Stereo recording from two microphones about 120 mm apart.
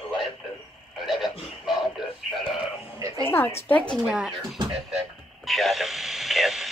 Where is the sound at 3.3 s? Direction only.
20° left (ahead or behind).